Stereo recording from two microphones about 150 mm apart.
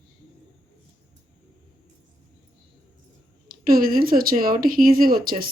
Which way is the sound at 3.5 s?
75° right (ahead or behind).